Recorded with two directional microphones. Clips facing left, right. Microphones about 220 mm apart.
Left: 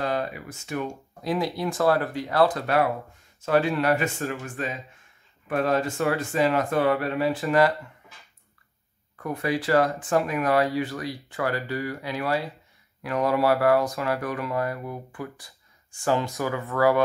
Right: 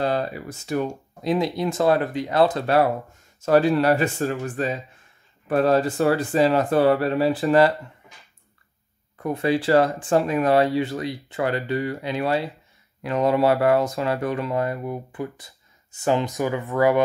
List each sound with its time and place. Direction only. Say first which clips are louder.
0.0 s speech: right 4 dB; 30° right (ahead or behind)
1.2 s speech: right 4 dB; 20° right (ahead or behind)
9.2 s speech: right 5 dB; 25° right (ahead or behind)